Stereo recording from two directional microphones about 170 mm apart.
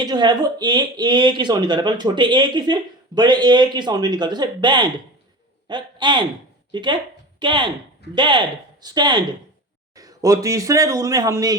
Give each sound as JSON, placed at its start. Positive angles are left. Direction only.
{"t": 0.0, "sound": "a man's voice", "side_deg": -25}